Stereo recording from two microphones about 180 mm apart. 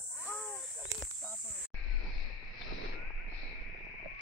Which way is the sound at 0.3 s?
15° left (ahead or behind).